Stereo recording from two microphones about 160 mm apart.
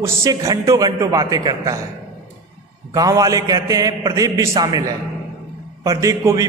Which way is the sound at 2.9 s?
20° right (ahead or behind).